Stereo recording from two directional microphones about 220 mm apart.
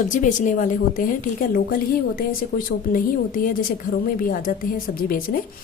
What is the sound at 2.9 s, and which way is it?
Speech, 40° left (ahead or behind).